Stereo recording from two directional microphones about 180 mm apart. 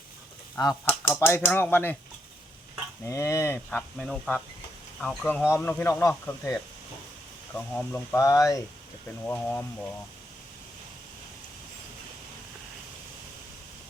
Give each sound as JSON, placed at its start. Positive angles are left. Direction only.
{"t": 0.6, "sound": "speech", "side_deg": 20}
{"t": 3.1, "sound": "speech", "side_deg": 15}
{"t": 7.5, "sound": "speech", "side_deg": 10}